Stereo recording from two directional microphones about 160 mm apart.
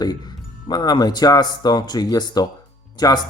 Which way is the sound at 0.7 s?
25° left (ahead or behind).